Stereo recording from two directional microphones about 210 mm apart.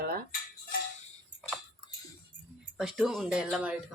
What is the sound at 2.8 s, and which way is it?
Speech, centre (ahead or behind).